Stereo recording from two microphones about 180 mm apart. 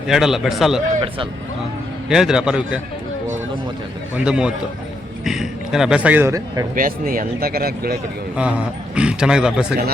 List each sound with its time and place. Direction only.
0.1 s a man's voice: centre (ahead or behind)
2.0 s a man's voice: 5° right (ahead or behind)
4.1 s a man's voice: 5° right (ahead or behind)
6.7 s speech: 50° right (ahead or behind)
8.4 s a man's voice: 5° right (ahead or behind)